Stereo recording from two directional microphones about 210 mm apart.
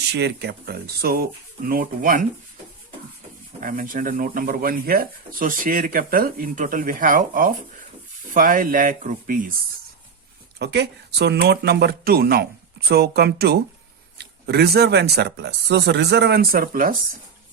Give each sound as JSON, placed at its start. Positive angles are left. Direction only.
{"t": 0.1, "sound": "speech", "side_deg": -50}
{"t": 3.6, "sound": "speech", "side_deg": -40}
{"t": 10.6, "sound": "speech", "side_deg": -55}